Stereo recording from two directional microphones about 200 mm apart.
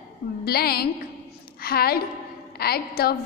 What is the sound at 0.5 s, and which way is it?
A woman's voice, 50° left (ahead or behind).